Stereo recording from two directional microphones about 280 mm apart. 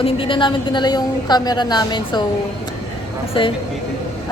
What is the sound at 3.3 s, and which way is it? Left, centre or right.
Speech, centre.